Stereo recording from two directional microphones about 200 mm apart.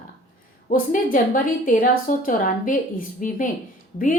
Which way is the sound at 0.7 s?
40° left (ahead or behind).